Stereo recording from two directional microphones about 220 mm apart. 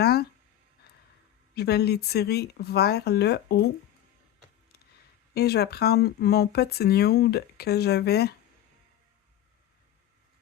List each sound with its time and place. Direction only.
0.0 s a sound: 45° left (ahead or behind)
1.5 s speech: 45° left (ahead or behind)
5.3 s speech: 45° left (ahead or behind)